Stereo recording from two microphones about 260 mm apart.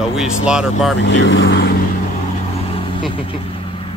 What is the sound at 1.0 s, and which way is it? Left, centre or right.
Speech, left.